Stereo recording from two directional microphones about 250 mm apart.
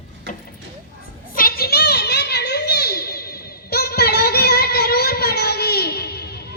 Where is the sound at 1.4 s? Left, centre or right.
Left.